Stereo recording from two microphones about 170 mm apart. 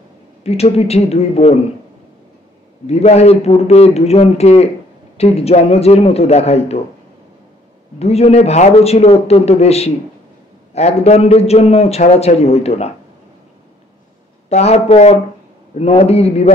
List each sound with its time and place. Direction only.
0.4 s a man's voice: 35° left (ahead or behind)
2.9 s a man's voice: 40° left (ahead or behind)
8.0 s a man's voice: 40° left (ahead or behind)
14.5 s a man's voice: 40° left (ahead or behind)